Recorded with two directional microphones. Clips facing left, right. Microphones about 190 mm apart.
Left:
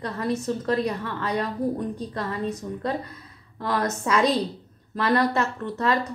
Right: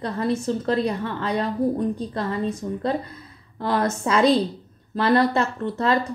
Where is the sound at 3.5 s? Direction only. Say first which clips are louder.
Right 3 dB; 30° right (ahead or behind).